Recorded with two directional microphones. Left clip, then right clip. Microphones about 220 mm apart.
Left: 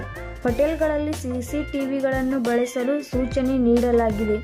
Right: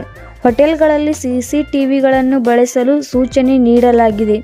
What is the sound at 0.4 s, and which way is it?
A woman's voice, 45° right (ahead or behind).